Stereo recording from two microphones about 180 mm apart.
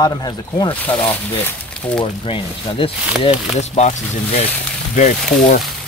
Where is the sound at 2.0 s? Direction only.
30° left (ahead or behind).